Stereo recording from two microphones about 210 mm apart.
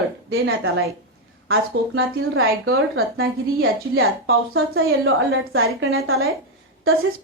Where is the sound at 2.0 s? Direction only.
70° right (ahead or behind).